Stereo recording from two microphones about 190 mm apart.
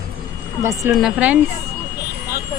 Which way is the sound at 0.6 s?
15° right (ahead or behind).